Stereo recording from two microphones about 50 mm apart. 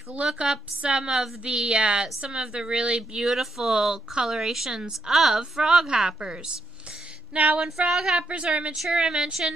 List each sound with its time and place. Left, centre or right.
0.3 s a woman's voice: centre
7.3 s a woman's voice: right
7.9 s speech: centre
8.2 s a woman's voice: right